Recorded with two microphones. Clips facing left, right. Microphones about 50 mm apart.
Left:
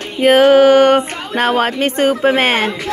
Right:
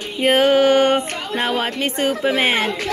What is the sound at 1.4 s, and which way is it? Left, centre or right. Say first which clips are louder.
Speech: left 7 dB; left.